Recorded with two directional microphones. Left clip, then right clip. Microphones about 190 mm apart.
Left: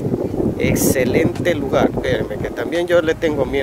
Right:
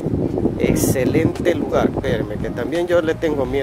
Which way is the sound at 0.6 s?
Centre (ahead or behind).